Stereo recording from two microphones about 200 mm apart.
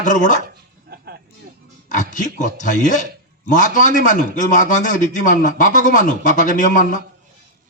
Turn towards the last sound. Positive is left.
turn(degrees=40)  # may be behind; listen again after turning